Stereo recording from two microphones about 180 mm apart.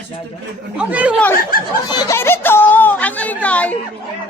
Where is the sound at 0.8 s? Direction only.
5° right (ahead or behind).